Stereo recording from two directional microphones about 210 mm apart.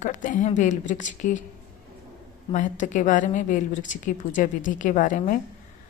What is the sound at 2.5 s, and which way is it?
A woman's voice, 35° left (ahead or behind).